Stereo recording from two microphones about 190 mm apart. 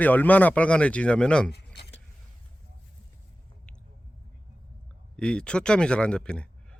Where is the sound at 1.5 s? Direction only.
60° left (ahead or behind).